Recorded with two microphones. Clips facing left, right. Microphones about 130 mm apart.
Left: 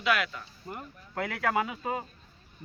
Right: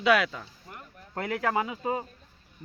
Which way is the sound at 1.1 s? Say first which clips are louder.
Right 1 dB; 25° right (ahead or behind).